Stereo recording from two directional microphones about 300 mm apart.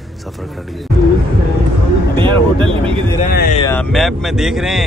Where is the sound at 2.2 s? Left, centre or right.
Centre.